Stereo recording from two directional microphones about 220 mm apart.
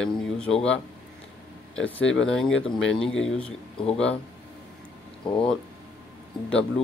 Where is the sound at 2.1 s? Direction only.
5° left (ahead or behind).